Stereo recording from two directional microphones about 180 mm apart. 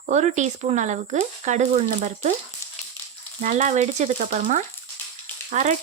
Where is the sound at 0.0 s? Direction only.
40° right (ahead or behind).